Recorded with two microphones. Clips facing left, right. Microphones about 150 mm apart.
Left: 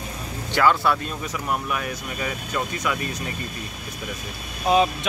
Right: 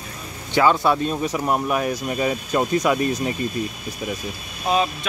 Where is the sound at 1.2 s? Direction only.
35° right (ahead or behind).